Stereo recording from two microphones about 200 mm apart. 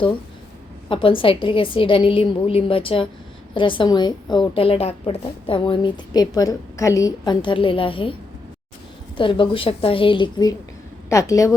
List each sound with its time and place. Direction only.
0.9 s a woman's voice: 25° left (ahead or behind)
9.1 s a woman's voice: 25° left (ahead or behind)